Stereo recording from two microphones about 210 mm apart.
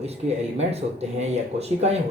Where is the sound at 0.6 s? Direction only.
30° right (ahead or behind).